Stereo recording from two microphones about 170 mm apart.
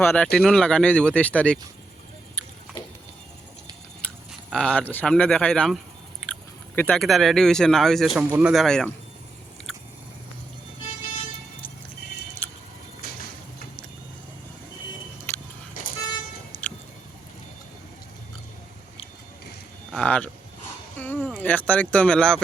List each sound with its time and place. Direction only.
0.0 s speech: 10° left (ahead or behind)
4.3 s speech: 5° left (ahead or behind)
12.4 s vehicle: 10° left (ahead or behind)
15.3 s a sound: 15° left (ahead or behind)
15.8 s vehicle: 50° left (ahead or behind)
19.9 s speech: 5° left (ahead or behind)
21.0 s a sound: 10° left (ahead or behind)
21.2 s insect: 10° left (ahead or behind)
21.7 s speech: 10° left (ahead or behind)